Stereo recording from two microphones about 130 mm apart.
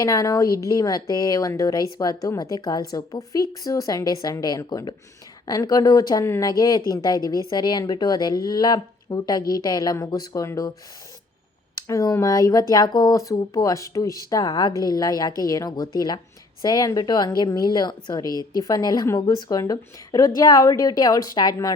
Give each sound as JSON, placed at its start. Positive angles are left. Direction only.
{"t": 0.0, "sound": "a woman's voice", "side_deg": 25}
{"t": 11.9, "sound": "a woman's voice", "side_deg": 25}